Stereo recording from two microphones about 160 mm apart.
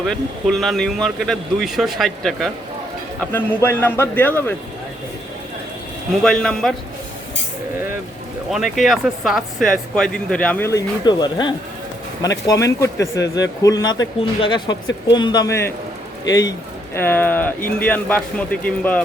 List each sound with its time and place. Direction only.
0.1 s speech: centre (ahead or behind)
3.2 s a man's voice: 15° left (ahead or behind)
6.2 s speech: 5° left (ahead or behind)
8.4 s a man's voice: centre (ahead or behind)